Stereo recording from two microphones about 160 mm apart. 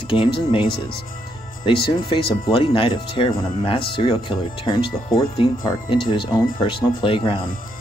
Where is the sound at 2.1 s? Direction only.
30° left (ahead or behind).